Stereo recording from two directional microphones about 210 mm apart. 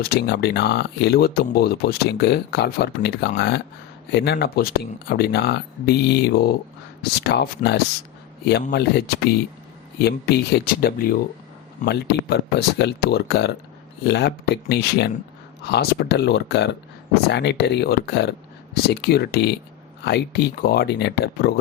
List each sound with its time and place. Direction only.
0.0 s speech: 50° left (ahead or behind)